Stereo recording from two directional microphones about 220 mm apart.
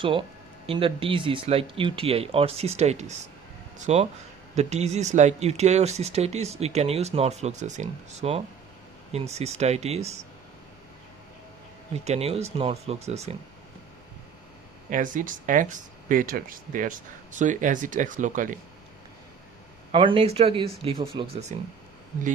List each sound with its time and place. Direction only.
0.0 s speech: 20° right (ahead or behind)
12.0 s speech: 30° right (ahead or behind)
14.8 s speech: 35° right (ahead or behind)
19.9 s speech: 25° right (ahead or behind)